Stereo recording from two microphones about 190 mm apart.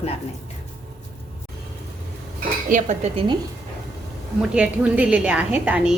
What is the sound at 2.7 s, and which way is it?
Speech, 40° right (ahead or behind).